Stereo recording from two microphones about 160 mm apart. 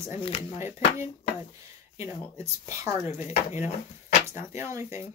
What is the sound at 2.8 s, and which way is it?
Speech, 15° right (ahead or behind).